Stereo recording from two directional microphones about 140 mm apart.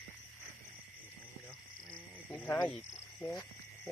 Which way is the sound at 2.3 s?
15° left (ahead or behind).